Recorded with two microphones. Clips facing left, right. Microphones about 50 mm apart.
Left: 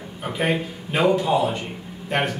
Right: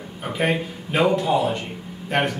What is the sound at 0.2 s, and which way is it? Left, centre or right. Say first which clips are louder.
Speech: even; centre.